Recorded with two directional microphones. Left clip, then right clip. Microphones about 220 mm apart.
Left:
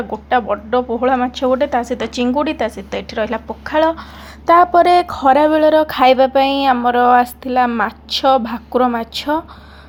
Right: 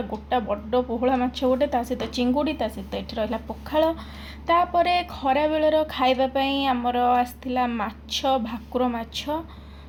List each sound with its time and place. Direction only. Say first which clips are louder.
0.3 s a woman's voice: left 9 dB; 15° left (ahead or behind)
4.4 s speech: left 10 dB; 35° left (ahead or behind)